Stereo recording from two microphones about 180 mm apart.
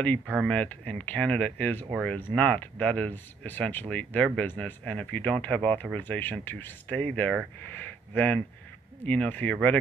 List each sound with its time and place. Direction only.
0.5 s speech: 5° left (ahead or behind)